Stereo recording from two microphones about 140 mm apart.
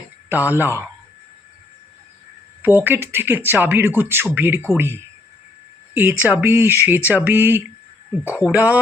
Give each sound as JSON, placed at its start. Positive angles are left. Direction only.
{"t": 0.3, "sound": "speech", "side_deg": -15}
{"t": 2.6, "sound": "speech", "side_deg": -15}